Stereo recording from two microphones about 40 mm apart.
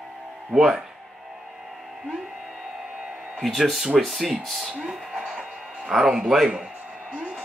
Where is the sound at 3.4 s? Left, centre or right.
Centre.